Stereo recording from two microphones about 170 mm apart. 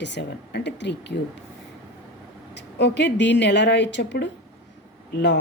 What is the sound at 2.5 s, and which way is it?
Speech, 85° left.